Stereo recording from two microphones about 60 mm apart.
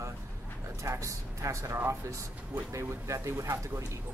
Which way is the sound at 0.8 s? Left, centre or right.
Right.